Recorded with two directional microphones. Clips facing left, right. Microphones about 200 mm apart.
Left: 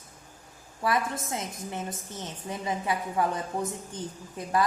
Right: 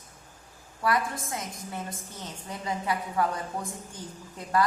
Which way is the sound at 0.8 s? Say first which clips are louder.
Even; 25° left (ahead or behind).